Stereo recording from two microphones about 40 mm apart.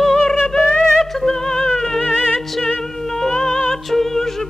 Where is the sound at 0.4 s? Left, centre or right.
Left.